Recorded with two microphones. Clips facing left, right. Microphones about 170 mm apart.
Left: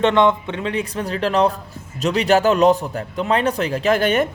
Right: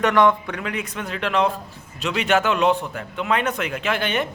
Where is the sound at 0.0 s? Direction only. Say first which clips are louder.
Left 2 dB; 25° left (ahead or behind).